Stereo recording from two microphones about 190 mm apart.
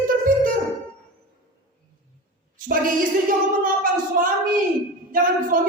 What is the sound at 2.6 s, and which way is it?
Speech, 45° right (ahead or behind).